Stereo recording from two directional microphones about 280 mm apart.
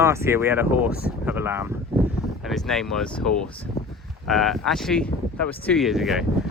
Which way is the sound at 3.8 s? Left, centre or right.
Left.